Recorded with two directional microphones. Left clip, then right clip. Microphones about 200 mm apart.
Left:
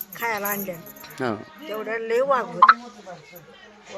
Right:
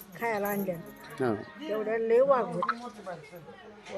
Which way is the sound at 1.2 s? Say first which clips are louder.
Left 3 dB; 15° left (ahead or behind).